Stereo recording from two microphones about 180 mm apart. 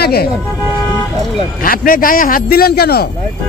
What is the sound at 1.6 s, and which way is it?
A man's voice, 50° left (ahead or behind).